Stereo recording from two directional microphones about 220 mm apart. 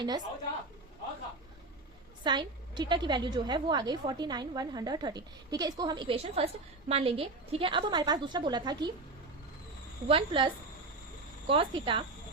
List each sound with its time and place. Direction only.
2.2 s a woman's voice: 20° right (ahead or behind)
10.1 s a woman's voice: 25° right (ahead or behind)